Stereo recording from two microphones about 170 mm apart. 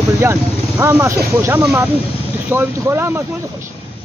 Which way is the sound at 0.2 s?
15° right (ahead or behind).